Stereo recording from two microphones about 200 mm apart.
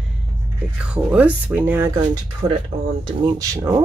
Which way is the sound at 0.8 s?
5° right (ahead or behind).